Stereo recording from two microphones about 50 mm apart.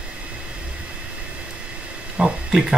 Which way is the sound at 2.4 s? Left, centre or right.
Centre.